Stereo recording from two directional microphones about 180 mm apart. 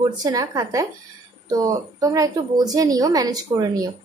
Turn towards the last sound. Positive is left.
turn(degrees=-20)  # may be behind; listen again after turning